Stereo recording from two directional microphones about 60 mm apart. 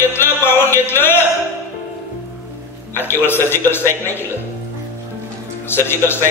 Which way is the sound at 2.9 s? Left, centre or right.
Left.